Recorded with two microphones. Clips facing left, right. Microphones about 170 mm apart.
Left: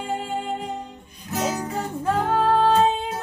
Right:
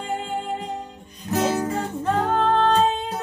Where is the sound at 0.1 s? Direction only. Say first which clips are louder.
Even; centre (ahead or behind).